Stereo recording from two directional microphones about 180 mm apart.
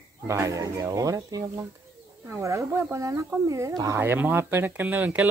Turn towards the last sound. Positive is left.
turn(degrees=-10)  # may be behind; listen again after turning